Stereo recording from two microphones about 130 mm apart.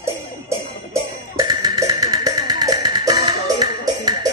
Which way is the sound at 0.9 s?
30° right (ahead or behind).